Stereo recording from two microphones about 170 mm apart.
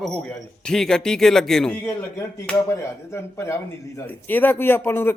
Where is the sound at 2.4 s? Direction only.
15° left (ahead or behind).